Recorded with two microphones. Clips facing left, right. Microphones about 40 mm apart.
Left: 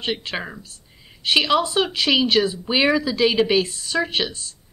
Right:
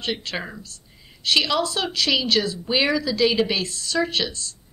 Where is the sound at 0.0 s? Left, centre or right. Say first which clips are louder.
Left 2 dB; centre.